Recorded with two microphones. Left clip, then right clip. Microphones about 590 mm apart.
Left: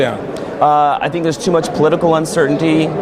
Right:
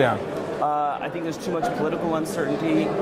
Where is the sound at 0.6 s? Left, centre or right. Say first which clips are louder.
Left 13 dB; left.